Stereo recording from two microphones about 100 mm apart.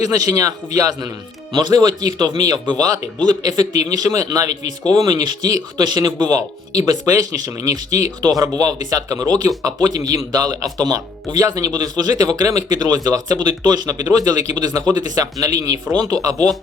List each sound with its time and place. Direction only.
0.0 s speech: 35° right (ahead or behind)